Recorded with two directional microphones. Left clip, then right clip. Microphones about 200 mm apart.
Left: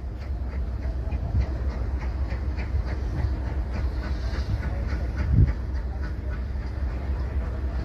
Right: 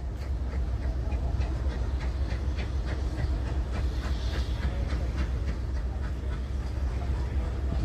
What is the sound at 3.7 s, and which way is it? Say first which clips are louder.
Train: left 1 dB; centre (ahead or behind).